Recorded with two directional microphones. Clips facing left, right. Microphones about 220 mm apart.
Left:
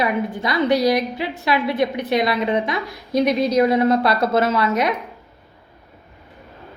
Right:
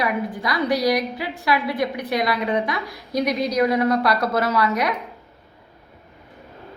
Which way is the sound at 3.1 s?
30° left (ahead or behind).